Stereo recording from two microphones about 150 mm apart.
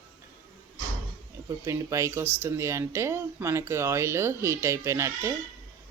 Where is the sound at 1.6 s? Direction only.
20° right (ahead or behind).